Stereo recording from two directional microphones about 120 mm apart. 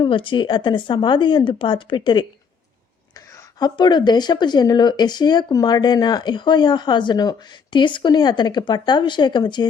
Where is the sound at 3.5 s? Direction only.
35° left (ahead or behind).